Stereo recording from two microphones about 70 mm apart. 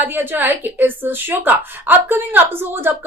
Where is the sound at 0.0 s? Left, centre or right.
Right.